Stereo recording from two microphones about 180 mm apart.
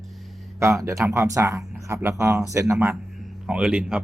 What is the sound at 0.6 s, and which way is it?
Speech, 15° right (ahead or behind).